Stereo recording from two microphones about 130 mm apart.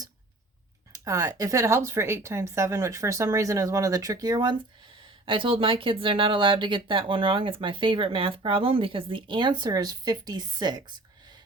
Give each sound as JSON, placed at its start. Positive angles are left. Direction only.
{"t": 0.9, "sound": "speech", "side_deg": -25}
{"t": 5.2, "sound": "speech", "side_deg": -40}